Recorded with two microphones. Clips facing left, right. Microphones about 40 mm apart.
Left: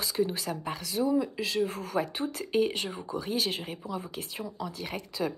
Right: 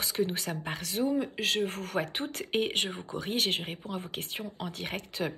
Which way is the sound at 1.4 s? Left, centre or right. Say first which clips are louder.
Even; right.